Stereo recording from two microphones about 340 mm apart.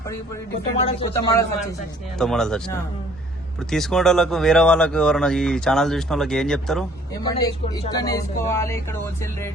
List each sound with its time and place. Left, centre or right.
0.9 s speech: centre
2.1 s speech: centre